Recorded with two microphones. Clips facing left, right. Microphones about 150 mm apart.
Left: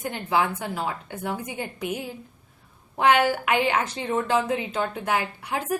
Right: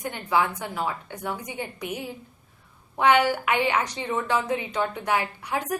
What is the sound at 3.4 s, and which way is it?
A woman's voice, 30° left (ahead or behind).